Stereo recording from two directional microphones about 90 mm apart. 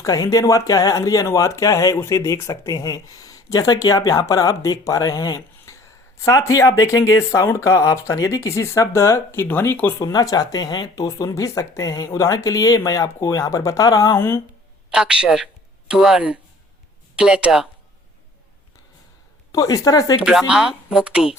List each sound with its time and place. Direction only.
0.0 s speech: 40° left (ahead or behind); by 9.9 s 25° left (ahead or behind)
10.0 s speech: 45° left (ahead or behind)
11.0 s speech: 35° left (ahead or behind)
14.8 s speech: 10° right (ahead or behind)
19.5 s speech: 40° left (ahead or behind)
20.5 s speech: 10° right (ahead or behind)